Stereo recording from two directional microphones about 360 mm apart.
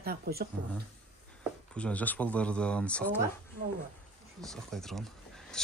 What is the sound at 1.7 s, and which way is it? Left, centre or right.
Speech, centre.